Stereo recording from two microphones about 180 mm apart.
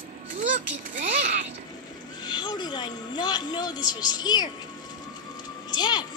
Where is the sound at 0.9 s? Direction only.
45° right (ahead or behind).